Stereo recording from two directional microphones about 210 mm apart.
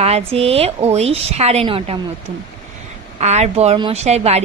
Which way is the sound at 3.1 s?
30° right (ahead or behind).